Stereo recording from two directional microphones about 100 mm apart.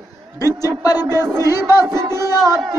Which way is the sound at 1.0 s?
25° right (ahead or behind).